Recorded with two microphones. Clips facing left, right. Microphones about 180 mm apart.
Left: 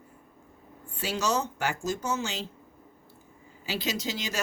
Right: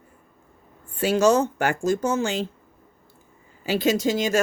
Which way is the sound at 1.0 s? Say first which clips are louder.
Right 10 dB; 50° right (ahead or behind).